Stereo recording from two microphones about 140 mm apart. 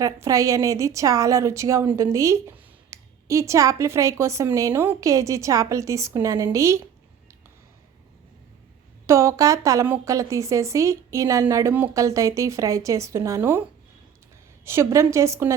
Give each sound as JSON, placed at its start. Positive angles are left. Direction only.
{"t": 0.0, "sound": "a woman's voice", "side_deg": -25}
{"t": 9.0, "sound": "a woman's voice", "side_deg": -20}